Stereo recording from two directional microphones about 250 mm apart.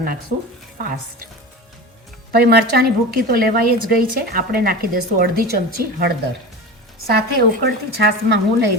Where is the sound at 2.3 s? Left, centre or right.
Right.